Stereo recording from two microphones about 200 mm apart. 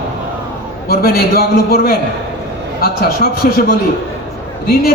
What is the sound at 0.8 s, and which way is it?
A man's voice, 50° left (ahead or behind).